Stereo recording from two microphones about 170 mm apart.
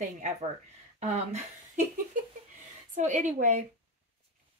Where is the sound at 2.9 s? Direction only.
45° right (ahead or behind).